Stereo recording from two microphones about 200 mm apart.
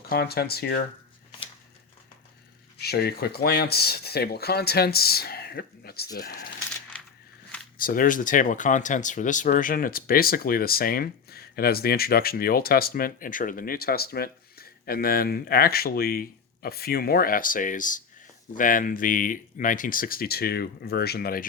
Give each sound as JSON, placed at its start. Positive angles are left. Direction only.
{"t": 0.1, "sound": "speech", "side_deg": 50}
{"t": 2.8, "sound": "speech", "side_deg": 50}
{"t": 7.8, "sound": "speech", "side_deg": 45}